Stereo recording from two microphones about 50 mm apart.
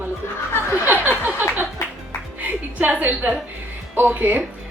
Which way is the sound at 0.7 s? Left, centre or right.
Right.